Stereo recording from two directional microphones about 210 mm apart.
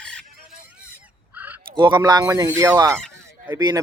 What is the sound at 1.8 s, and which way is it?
Speech, 20° right (ahead or behind).